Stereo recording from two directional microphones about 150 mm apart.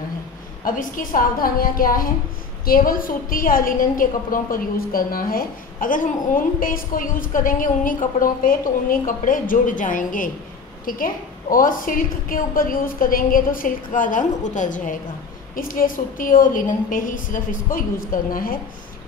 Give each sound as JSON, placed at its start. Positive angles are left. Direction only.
{"t": 0.7, "sound": "a woman's voice", "side_deg": 70}
{"t": 15.5, "sound": "a woman's voice", "side_deg": 70}